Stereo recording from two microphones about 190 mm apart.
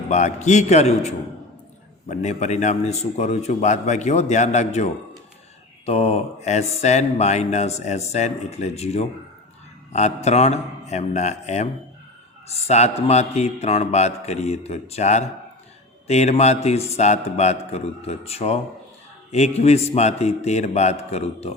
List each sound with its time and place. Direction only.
0.1 s mantra: 40° left (ahead or behind)